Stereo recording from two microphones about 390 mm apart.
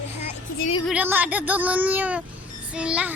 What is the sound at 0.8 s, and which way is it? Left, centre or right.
A woman's voice, centre.